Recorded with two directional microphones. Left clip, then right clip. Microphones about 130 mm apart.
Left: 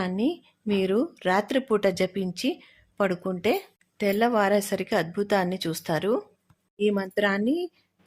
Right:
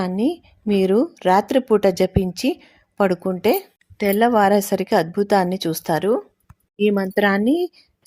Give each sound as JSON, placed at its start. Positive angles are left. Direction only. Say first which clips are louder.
{"t": 0.2, "sound": "speech", "louder": "right 5 dB", "side_deg": -35}
{"t": 3.9, "sound": "speech", "louder": "right 6 dB", "side_deg": -30}